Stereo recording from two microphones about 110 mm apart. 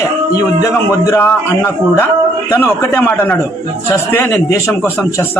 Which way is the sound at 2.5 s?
20° left (ahead or behind).